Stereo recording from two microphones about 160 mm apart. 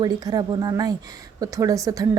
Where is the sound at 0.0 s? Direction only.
25° right (ahead or behind).